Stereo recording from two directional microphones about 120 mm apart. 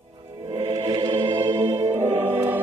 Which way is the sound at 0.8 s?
35° right (ahead or behind).